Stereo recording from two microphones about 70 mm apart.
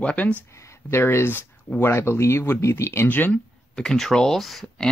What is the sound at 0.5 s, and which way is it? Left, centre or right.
Speech, left.